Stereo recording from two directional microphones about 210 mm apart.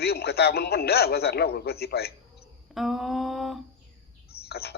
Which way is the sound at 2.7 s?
Centre (ahead or behind).